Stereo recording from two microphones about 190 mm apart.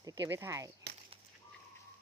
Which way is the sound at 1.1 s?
30° right (ahead or behind).